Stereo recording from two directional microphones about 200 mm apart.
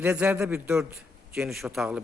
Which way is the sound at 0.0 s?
5° right (ahead or behind).